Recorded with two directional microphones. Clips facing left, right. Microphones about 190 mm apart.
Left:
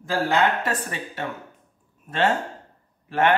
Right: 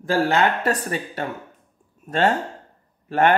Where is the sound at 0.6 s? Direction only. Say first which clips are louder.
Right 5 dB; 35° right (ahead or behind).